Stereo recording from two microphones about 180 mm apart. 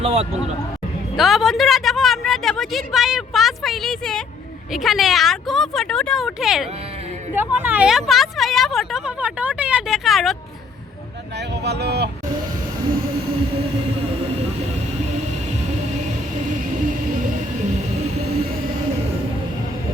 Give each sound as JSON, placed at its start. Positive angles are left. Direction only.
{"t": 0.0, "sound": "speech", "side_deg": -35}
{"t": 1.1, "sound": "a woman's voice", "side_deg": 0}
{"t": 11.3, "sound": "speech", "side_deg": -70}